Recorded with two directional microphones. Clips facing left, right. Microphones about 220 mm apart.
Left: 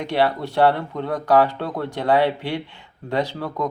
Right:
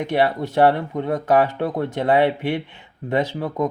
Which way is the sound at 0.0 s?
20° right (ahead or behind).